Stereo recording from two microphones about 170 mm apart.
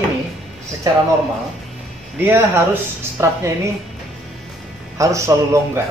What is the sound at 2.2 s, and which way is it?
Speech, 10° right (ahead or behind).